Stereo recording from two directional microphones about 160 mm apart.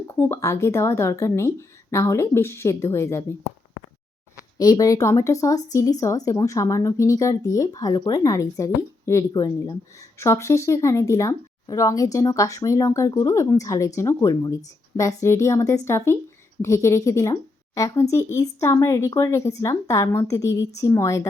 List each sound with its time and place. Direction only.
0.1 s a woman's voice: 15° left (ahead or behind)
4.5 s a woman's voice: 25° left (ahead or behind)